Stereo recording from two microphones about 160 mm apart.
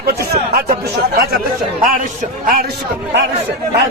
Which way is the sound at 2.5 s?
85° right.